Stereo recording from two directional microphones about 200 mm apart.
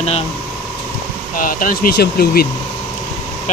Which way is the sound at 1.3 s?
45° left (ahead or behind).